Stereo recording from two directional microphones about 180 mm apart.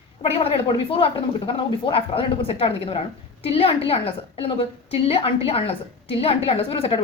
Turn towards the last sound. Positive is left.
turn(degrees=30)  # may be behind; listen again after turning